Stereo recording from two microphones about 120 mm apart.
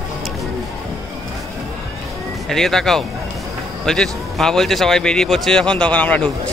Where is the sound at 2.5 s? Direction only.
5° left (ahead or behind).